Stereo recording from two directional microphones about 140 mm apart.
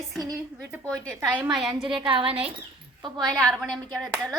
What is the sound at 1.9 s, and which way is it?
A woman's voice, 35° right (ahead or behind).